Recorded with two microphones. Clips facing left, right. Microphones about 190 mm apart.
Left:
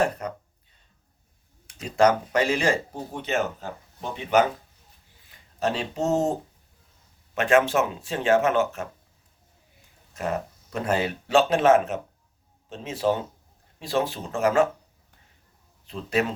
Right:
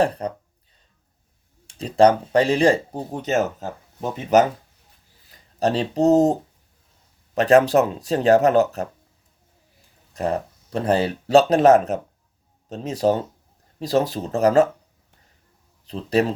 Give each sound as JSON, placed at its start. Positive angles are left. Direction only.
{"t": 0.0, "sound": "speech", "side_deg": -35}
{"t": 1.6, "sound": "speech", "side_deg": -30}
{"t": 7.3, "sound": "speech", "side_deg": -35}
{"t": 10.2, "sound": "speech", "side_deg": -35}
{"t": 15.9, "sound": "speech", "side_deg": -35}